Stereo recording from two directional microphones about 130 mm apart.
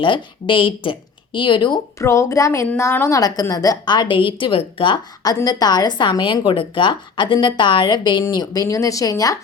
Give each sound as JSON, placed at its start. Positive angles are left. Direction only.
{"t": 0.0, "sound": "a woman's voice", "side_deg": 40}
{"t": 2.0, "sound": "a woman's voice", "side_deg": 25}